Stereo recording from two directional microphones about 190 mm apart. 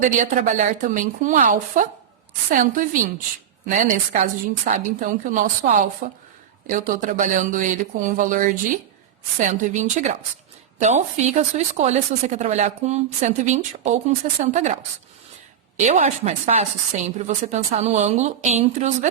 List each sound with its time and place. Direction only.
0.0 s a woman's voice: 40° right (ahead or behind)
15.8 s a woman's voice: 40° right (ahead or behind)